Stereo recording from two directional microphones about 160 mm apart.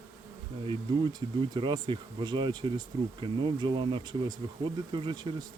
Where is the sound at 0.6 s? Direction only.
25° right (ahead or behind).